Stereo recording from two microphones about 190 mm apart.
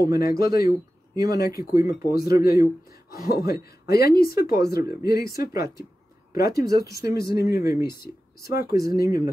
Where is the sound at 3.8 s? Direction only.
55° left (ahead or behind).